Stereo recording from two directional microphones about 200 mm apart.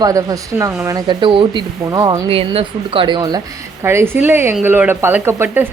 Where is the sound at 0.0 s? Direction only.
15° right (ahead or behind).